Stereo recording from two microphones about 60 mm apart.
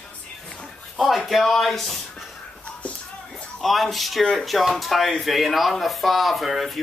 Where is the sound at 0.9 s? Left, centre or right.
Centre.